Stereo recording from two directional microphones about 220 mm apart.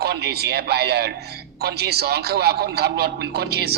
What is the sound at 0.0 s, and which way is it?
A man's voice, 45° right (ahead or behind).